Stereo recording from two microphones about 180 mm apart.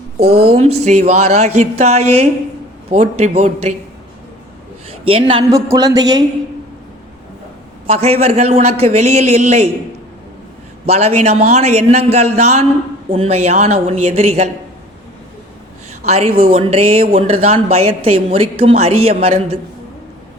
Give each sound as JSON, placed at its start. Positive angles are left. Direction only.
{"t": 0.4, "sound": "speech", "side_deg": -35}
{"t": 4.9, "sound": "a man's voice", "side_deg": -30}
{"t": 7.9, "sound": "speech", "side_deg": -35}
{"t": 10.8, "sound": "speech", "side_deg": -35}
{"t": 15.9, "sound": "a sound", "side_deg": -35}
{"t": 16.4, "sound": "speech", "side_deg": -30}